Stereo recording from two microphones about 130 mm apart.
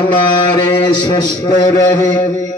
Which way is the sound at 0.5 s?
35° left (ahead or behind).